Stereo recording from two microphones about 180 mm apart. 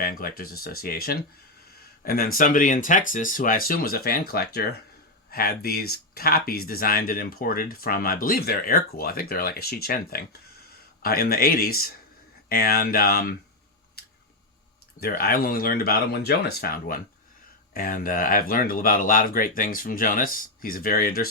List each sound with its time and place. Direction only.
0.0 s speech: 55° left (ahead or behind)
14.0 s scissors: 60° left (ahead or behind)
15.0 s speech: 55° left (ahead or behind)